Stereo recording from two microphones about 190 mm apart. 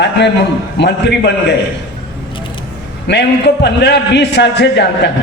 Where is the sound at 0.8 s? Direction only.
60° left (ahead or behind).